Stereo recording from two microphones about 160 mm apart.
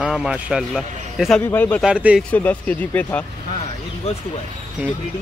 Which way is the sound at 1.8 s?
5° right (ahead or behind).